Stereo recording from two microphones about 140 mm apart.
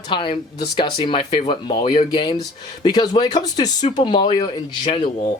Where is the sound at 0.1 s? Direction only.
35° left (ahead or behind).